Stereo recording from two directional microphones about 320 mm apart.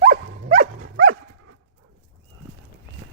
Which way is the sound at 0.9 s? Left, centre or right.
Right.